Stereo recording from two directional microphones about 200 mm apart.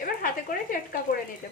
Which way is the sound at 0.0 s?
45° left (ahead or behind).